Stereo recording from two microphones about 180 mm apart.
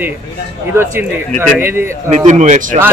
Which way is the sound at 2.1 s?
40° right (ahead or behind).